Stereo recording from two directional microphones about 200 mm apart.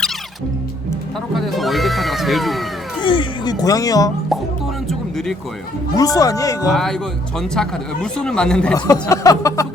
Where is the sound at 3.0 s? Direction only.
25° left (ahead or behind).